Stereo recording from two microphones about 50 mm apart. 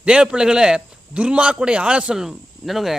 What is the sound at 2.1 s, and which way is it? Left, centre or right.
Speech, centre.